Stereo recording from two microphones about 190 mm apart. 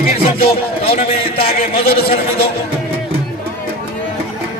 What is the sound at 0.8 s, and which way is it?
A man's voice, 30° left (ahead or behind).